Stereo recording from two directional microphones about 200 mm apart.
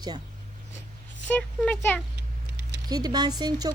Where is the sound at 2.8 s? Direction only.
20° right (ahead or behind).